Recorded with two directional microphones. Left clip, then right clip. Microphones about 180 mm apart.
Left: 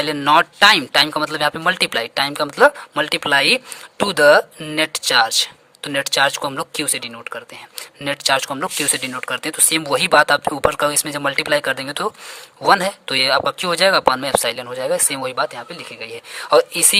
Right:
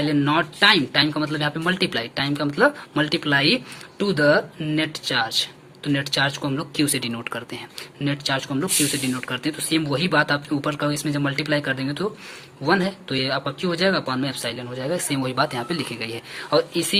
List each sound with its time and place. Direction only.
0.0 s speech: 45° left (ahead or behind); by 7.6 s 25° left (ahead or behind)
7.8 s speech: 45° left (ahead or behind); by 16.2 s 25° left (ahead or behind)
16.3 s speech: 40° left (ahead or behind)